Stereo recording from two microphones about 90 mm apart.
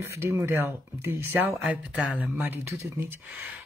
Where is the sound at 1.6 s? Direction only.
15° right (ahead or behind).